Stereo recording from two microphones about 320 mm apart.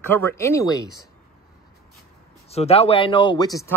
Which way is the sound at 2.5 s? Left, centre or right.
Centre.